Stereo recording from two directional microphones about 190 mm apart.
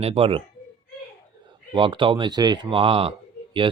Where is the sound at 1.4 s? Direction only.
25° right (ahead or behind).